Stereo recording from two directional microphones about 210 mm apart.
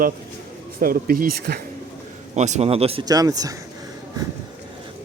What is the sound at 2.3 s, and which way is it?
Speech, 35° right (ahead or behind).